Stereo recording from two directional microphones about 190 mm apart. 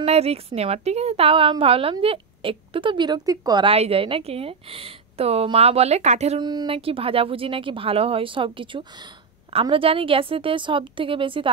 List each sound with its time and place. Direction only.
0.0 s a woman's voice: 30° right (ahead or behind)
6.4 s speech: 25° right (ahead or behind)